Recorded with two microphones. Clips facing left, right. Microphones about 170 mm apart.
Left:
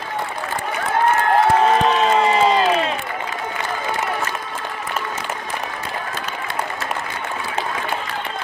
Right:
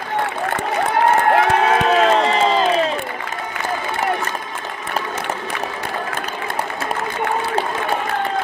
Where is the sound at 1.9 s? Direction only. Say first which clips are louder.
Right 2 dB; 65° right (ahead or behind).